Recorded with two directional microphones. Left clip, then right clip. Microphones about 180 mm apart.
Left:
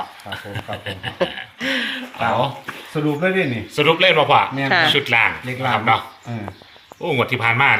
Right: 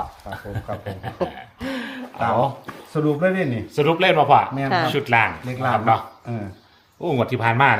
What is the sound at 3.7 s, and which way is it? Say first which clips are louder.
Speech: left 3 dB; 65° right (ahead or behind).